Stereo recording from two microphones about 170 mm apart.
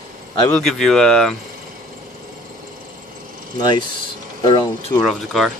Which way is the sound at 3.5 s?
25° left (ahead or behind).